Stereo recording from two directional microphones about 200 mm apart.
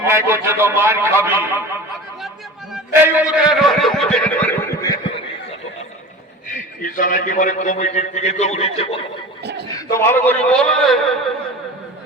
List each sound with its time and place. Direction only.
0.1 s a man's voice: 10° right (ahead or behind)
2.7 s a man's voice: 10° right (ahead or behind); by 4.9 s 5° left (ahead or behind)
6.8 s a man's voice: 40° left (ahead or behind)
9.7 s a man's voice: 15° left (ahead or behind)